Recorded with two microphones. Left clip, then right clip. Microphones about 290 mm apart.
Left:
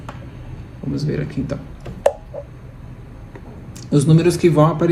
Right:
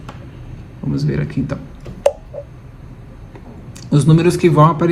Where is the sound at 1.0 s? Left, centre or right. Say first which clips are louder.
Right 2 dB; centre.